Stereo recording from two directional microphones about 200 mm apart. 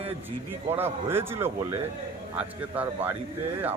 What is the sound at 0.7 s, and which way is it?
Speech, 10° right (ahead or behind).